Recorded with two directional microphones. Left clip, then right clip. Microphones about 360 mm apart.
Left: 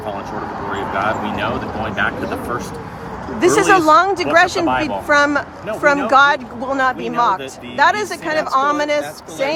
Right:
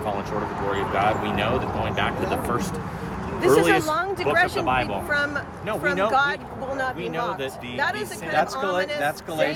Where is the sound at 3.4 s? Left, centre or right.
Centre.